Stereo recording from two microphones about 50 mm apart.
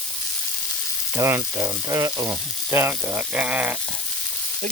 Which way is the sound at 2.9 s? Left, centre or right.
Right.